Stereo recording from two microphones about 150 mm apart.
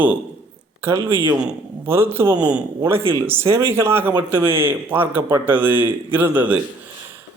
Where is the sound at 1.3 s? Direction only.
15° right (ahead or behind).